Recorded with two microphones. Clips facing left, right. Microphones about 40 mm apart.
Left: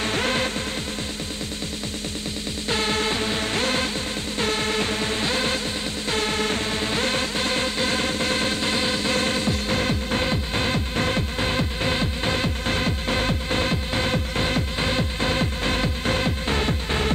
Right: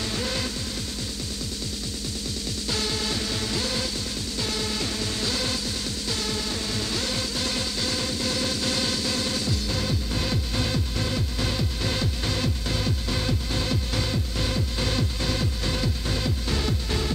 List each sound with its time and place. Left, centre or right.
0.0 s music: left
2.7 s music: left